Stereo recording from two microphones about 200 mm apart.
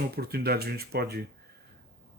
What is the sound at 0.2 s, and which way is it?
Speech, 50° right (ahead or behind).